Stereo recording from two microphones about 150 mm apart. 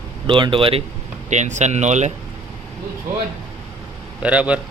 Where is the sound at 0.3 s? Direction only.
35° right (ahead or behind).